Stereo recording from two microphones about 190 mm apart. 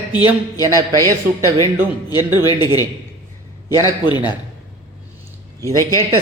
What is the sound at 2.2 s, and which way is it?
Speech, 20° left (ahead or behind).